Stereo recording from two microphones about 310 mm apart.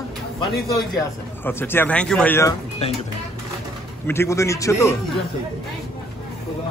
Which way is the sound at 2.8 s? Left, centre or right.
Centre.